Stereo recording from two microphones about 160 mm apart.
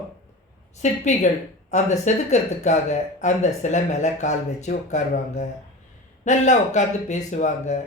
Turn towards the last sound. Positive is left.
turn(degrees=50)  # may be behind; listen again after turning